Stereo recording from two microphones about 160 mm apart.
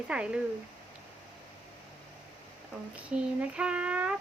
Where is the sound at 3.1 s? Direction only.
5° right (ahead or behind).